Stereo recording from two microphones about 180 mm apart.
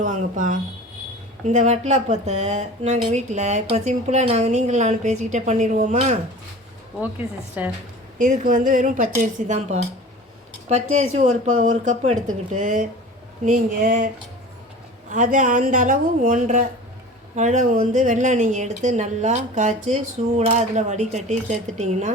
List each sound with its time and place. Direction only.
0.0 s a woman's voice: 45° right (ahead or behind)
7.6 s a woman's voice: 10° right (ahead or behind)
8.2 s a woman's voice: 45° right (ahead or behind)
15.1 s a woman's voice: 45° right (ahead or behind)